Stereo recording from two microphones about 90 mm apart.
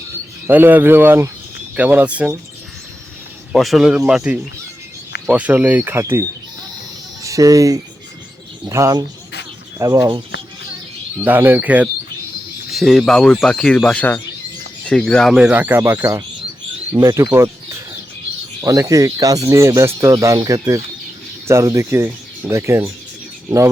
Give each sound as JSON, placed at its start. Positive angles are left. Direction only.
{"t": 0.4, "sound": "speech", "side_deg": -20}
{"t": 3.5, "sound": "speech", "side_deg": -5}
{"t": 7.3, "sound": "speech", "side_deg": -40}
{"t": 11.2, "sound": "speech", "side_deg": -20}
{"t": 12.7, "sound": "speech", "side_deg": 0}
{"t": 15.5, "sound": "speech", "side_deg": -25}
{"t": 17.0, "sound": "speech", "side_deg": -40}
{"t": 17.3, "sound": "bird", "side_deg": -30}
{"t": 18.6, "sound": "speech", "side_deg": -35}